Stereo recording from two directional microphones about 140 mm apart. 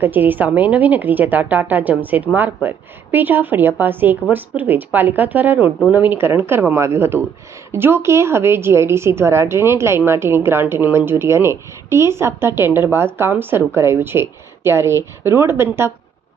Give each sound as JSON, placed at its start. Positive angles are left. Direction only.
{"t": 0.0, "sound": "a woman's voice", "side_deg": -15}